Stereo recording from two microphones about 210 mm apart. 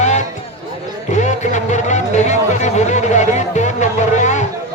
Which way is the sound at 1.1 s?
35° left (ahead or behind).